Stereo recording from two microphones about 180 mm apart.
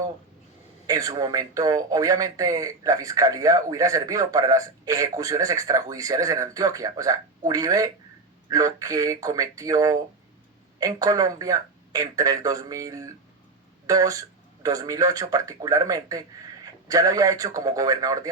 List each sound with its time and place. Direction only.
0.9 s a man's voice: 20° right (ahead or behind)